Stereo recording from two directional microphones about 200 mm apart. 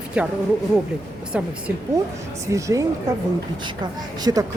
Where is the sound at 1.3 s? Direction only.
5° right (ahead or behind).